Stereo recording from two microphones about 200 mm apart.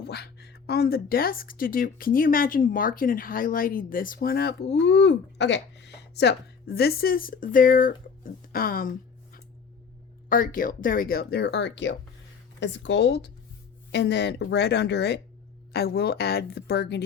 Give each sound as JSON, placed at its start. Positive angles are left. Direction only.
{"t": 0.0, "sound": "a woman's voice", "side_deg": 55}